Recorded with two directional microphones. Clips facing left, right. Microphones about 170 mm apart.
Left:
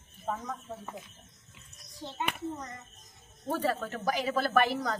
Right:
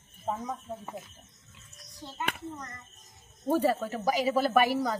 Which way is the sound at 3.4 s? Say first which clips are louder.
Right 5 dB; 15° right (ahead or behind).